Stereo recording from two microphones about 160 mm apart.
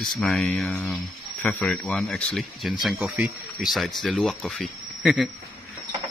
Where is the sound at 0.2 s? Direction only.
5° left (ahead or behind).